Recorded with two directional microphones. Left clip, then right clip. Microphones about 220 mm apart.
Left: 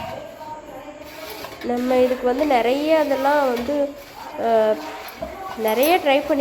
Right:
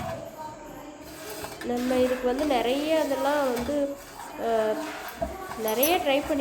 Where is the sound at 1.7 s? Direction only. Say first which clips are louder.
Left 7 dB; 20° left (ahead or behind).